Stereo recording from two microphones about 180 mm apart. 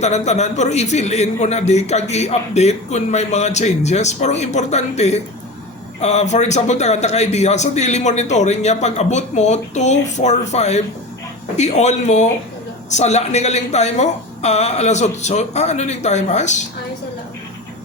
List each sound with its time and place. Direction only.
0.0 s a man's voice: 40° left (ahead or behind)